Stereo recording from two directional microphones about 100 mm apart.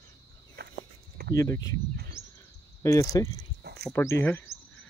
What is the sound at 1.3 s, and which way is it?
Speech, 35° left (ahead or behind).